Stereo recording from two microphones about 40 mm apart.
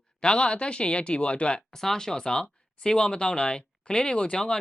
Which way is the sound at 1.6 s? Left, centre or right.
Centre.